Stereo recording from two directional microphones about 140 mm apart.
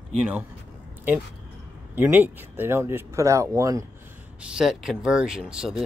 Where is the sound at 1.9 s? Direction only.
15° right (ahead or behind).